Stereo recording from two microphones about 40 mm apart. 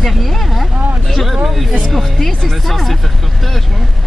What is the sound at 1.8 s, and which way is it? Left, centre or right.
Speech, centre.